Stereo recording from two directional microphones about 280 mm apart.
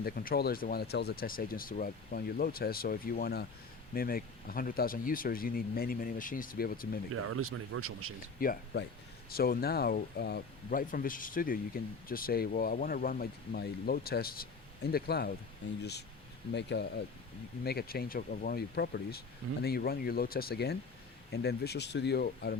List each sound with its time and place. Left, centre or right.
0.0 s speech: left
7.1 s speech: right
8.4 s speech: left